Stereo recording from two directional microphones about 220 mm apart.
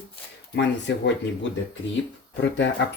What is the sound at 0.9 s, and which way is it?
Speech, 55° left (ahead or behind).